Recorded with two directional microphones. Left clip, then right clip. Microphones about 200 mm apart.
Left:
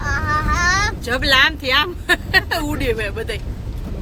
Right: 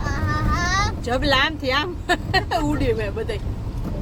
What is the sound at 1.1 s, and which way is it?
Speech, 10° right (ahead or behind).